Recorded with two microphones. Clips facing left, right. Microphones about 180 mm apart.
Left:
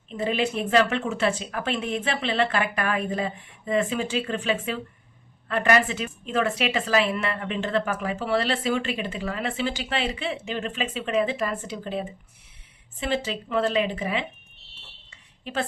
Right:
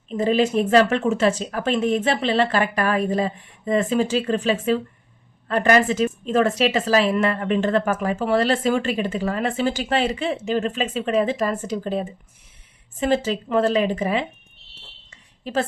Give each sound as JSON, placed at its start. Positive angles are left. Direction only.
{"t": 0.1, "sound": "a woman's voice", "side_deg": -40}
{"t": 15.5, "sound": "a woman's voice", "side_deg": -35}